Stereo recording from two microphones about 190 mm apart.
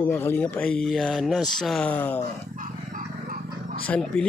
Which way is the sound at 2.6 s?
45° right (ahead or behind).